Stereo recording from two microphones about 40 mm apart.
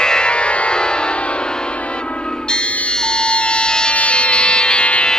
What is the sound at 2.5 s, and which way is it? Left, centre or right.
Music, left.